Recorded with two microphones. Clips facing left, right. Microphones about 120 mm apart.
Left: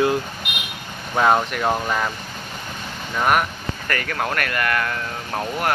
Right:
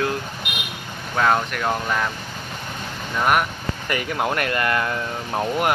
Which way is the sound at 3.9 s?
15° right (ahead or behind).